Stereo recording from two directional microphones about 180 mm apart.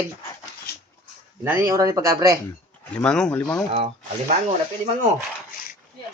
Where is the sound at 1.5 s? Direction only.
15° right (ahead or behind).